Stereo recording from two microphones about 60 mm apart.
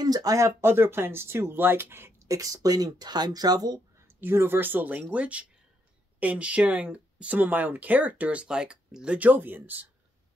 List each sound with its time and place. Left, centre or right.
0.0 s speech: right
0.5 s speech: right
2.2 s speech: right
4.2 s speech: right